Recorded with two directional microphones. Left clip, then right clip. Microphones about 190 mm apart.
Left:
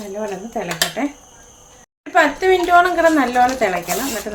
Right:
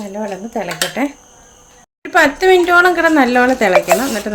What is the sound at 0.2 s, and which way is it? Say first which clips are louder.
Speech: right 3 dB; 45° right (ahead or behind).